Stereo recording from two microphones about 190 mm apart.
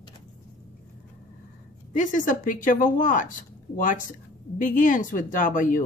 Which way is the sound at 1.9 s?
40° left (ahead or behind).